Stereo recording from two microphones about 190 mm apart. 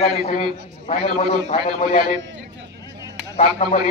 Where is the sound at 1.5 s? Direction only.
45° left (ahead or behind).